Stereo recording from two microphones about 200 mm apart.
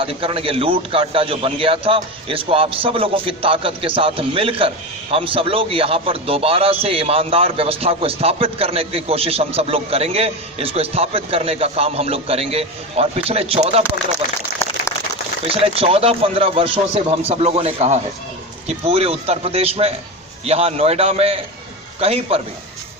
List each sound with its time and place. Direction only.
0.0 s a man's voice: 25° right (ahead or behind)
15.4 s a man's voice: 30° right (ahead or behind)